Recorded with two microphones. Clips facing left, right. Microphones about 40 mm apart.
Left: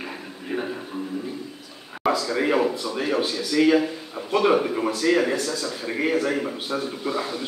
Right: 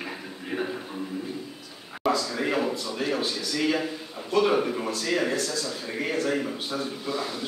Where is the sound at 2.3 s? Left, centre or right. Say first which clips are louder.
Left 5 dB; centre.